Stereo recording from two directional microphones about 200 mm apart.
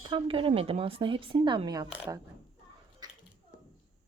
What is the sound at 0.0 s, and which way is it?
Speech, 25° right (ahead or behind).